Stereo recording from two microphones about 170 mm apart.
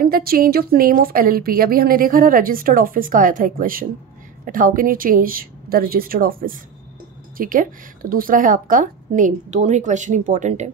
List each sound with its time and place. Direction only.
0.0 s a woman's voice: 60° right (ahead or behind)